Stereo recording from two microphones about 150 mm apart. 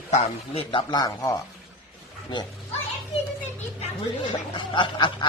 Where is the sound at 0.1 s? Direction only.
40° left (ahead or behind); by 1.4 s 25° left (ahead or behind).